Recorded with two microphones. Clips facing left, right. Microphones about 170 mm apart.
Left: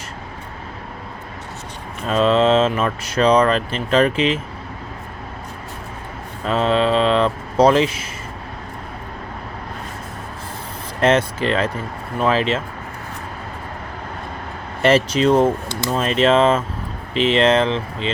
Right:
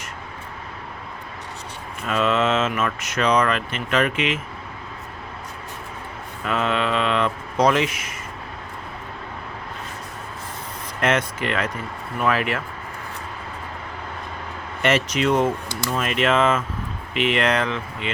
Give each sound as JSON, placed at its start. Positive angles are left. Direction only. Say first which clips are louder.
{"t": 2.0, "sound": "speech", "louder": "left 5 dB", "side_deg": 30}
{"t": 6.4, "sound": "speech", "louder": "left 5 dB", "side_deg": 30}
{"t": 11.0, "sound": "speech", "louder": "left 5 dB", "side_deg": 30}
{"t": 14.8, "sound": "speech", "louder": "left 5 dB", "side_deg": 30}